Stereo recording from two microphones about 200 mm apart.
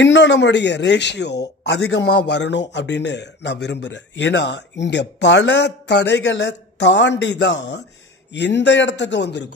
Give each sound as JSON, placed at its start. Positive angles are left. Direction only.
{"t": 0.0, "sound": "speech", "side_deg": 60}